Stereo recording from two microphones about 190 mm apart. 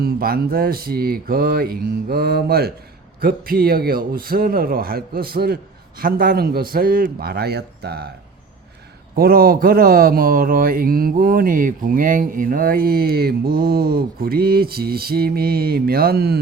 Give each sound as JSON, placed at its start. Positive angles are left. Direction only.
{"t": 0.0, "sound": "speech", "side_deg": -55}
{"t": 9.1, "sound": "speech", "side_deg": -50}